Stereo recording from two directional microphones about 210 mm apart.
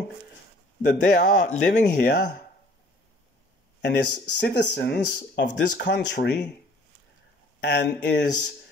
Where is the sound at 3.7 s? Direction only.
55° left (ahead or behind).